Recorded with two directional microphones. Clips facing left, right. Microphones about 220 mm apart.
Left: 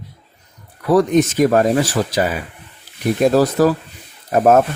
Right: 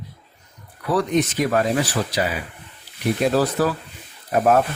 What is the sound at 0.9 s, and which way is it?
A man's voice, 45° left (ahead or behind).